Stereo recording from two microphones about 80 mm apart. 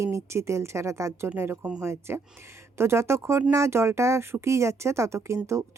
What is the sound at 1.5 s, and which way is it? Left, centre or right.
Speech, centre.